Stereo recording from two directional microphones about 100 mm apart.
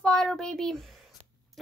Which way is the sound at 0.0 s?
5° left (ahead or behind).